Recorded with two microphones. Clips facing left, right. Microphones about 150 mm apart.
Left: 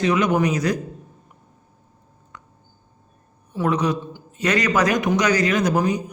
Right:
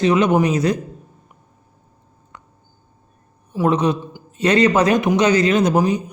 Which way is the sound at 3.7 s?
25° right (ahead or behind).